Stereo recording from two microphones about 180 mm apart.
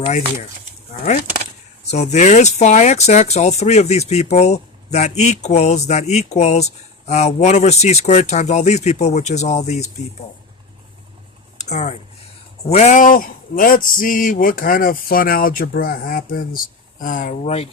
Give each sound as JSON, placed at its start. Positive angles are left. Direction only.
{"t": 1.9, "sound": "speech", "side_deg": 40}
{"t": 11.5, "sound": "a sound", "side_deg": 40}
{"t": 12.6, "sound": "speech", "side_deg": 40}